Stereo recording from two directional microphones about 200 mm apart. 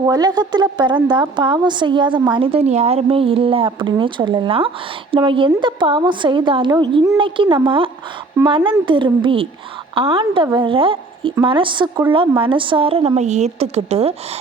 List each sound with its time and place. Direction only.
0.0 s speech: 20° right (ahead or behind)